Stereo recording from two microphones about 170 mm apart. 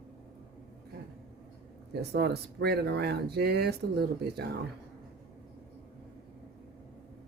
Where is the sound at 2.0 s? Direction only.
75° right (ahead or behind).